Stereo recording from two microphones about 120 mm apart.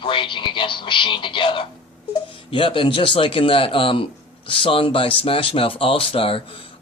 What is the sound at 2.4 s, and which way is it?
A man's voice, 45° left (ahead or behind).